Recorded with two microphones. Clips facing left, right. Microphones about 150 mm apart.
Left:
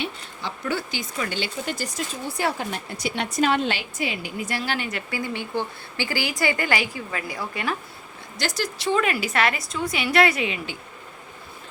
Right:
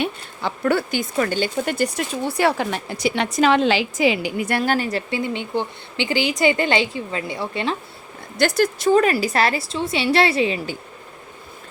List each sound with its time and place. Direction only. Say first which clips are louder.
0.0 s speech: right 6 dB; 55° right (ahead or behind); by 5.2 s 35° right (ahead or behind)
5.2 s a woman's voice: right 4 dB; 20° right (ahead or behind)
8.4 s speech: right 10 dB; 55° right (ahead or behind)
8.9 s a woman's voice: right 5 dB; 40° right (ahead or behind)